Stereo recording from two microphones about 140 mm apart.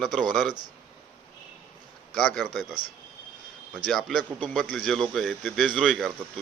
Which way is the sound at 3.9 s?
Centre (ahead or behind).